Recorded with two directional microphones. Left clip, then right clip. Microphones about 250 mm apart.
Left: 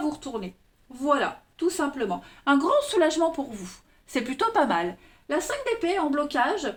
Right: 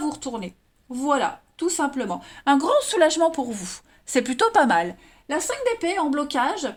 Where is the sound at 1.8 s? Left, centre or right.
Right.